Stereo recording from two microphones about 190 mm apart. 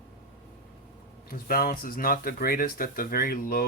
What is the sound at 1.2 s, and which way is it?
Speech, 50° left (ahead or behind).